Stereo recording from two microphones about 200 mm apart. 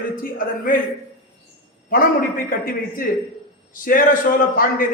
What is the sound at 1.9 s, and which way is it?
A man's voice, 45° left (ahead or behind).